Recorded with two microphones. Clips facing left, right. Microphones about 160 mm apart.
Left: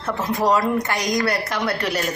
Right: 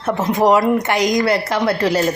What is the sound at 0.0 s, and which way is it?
A woman's voice, 20° right (ahead or behind).